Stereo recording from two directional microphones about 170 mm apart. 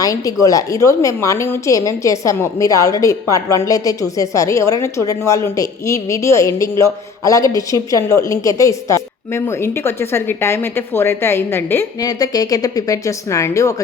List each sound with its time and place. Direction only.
0.0 s a woman's voice: 20° left (ahead or behind)